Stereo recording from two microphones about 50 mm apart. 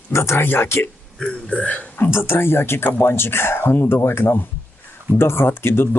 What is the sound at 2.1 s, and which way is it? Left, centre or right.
Speech, left.